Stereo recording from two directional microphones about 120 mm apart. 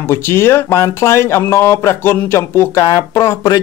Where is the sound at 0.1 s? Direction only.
20° left (ahead or behind).